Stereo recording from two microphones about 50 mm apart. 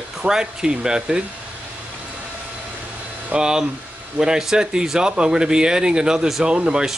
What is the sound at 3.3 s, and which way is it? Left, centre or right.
A man's voice, centre.